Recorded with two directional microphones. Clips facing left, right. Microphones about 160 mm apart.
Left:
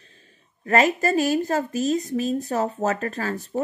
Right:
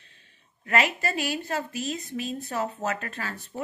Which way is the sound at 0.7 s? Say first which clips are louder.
Left 6 dB; 40° left (ahead or behind).